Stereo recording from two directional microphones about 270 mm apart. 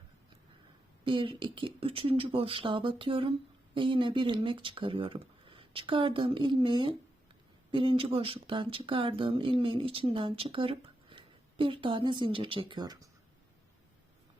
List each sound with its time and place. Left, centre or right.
1.0 s speech: centre